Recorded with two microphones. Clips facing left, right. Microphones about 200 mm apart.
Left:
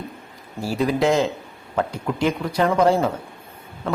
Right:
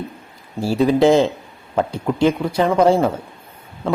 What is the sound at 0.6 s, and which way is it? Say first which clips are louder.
Speech: right 6 dB; 30° right (ahead or behind).